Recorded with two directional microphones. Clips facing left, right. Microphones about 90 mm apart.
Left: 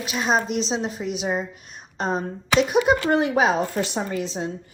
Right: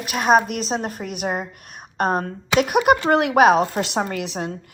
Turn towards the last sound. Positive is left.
turn(degrees=-75)  # may be behind; listen again after turning